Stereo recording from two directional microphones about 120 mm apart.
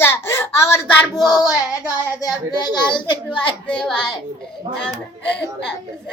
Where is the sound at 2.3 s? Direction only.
40° left (ahead or behind).